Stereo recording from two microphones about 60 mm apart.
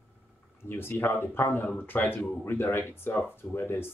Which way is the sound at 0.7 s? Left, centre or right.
Left.